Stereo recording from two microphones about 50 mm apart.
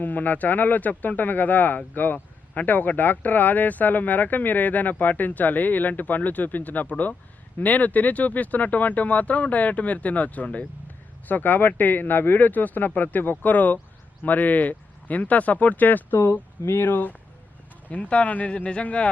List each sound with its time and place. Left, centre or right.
0.0 s speech: left